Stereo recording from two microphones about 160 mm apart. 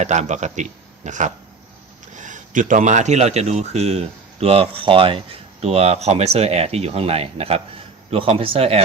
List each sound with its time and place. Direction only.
0.0 s a man's voice: 45° right (ahead or behind)